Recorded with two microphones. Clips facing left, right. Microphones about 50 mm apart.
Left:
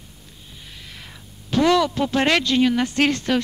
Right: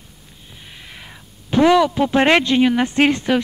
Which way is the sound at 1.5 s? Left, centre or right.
Centre.